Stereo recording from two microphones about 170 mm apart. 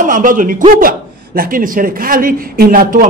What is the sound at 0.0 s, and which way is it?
A man's voice, 50° right (ahead or behind).